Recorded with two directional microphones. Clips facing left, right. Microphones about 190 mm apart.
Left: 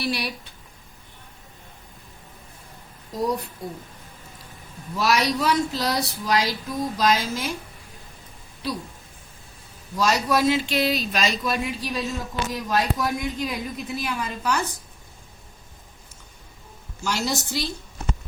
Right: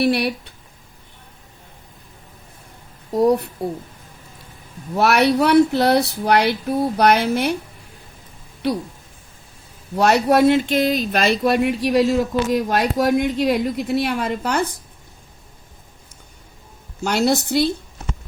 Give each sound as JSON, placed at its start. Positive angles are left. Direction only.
{"t": 0.0, "sound": "speech", "side_deg": -60}
{"t": 3.1, "sound": "speech", "side_deg": -65}
{"t": 4.9, "sound": "speech", "side_deg": -65}
{"t": 8.6, "sound": "speech", "side_deg": -65}
{"t": 10.0, "sound": "speech", "side_deg": -65}
{"t": 17.0, "sound": "speech", "side_deg": -60}